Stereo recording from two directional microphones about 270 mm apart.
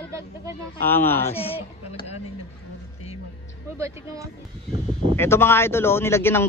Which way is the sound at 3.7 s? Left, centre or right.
Centre.